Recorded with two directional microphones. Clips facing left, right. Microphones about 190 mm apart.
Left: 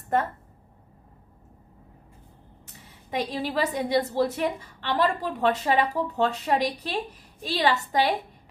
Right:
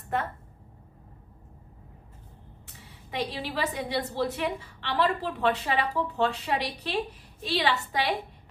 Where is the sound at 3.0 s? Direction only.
40° left (ahead or behind).